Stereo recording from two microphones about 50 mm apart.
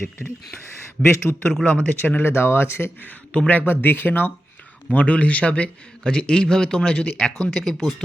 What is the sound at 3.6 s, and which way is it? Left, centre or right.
Speech, left.